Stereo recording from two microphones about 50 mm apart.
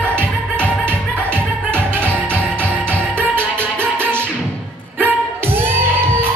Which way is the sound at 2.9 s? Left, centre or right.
Right.